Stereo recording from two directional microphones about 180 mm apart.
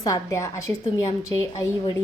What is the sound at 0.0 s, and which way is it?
Speech, 20° left (ahead or behind).